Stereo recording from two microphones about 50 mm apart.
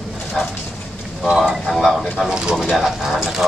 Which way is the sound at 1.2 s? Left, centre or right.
Centre.